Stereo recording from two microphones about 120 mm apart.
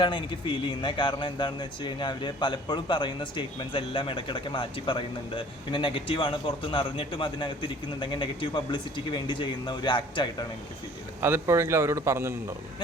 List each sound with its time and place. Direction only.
0.0 s speech: 45° left (ahead or behind)
11.2 s a man's voice: 20° right (ahead or behind)